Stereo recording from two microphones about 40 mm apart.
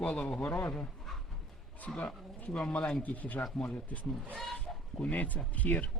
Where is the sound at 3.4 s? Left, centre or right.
Centre.